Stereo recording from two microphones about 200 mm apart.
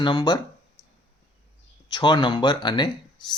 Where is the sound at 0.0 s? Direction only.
20° left (ahead or behind).